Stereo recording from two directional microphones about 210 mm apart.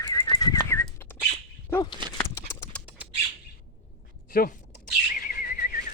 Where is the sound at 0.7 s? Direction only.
10° left (ahead or behind).